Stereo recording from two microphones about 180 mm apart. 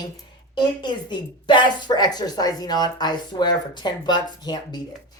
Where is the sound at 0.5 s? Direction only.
25° left (ahead or behind).